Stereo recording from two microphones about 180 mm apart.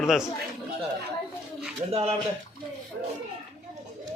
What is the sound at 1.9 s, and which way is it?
Speech, 35° right (ahead or behind).